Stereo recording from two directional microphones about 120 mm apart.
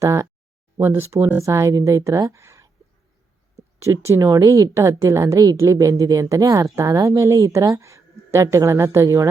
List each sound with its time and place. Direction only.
0.0 s speech: 25° right (ahead or behind)